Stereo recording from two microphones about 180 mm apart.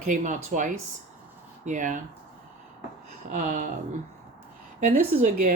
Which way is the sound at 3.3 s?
45° right (ahead or behind).